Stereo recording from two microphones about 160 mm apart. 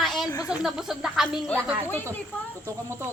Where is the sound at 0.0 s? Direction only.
Centre (ahead or behind).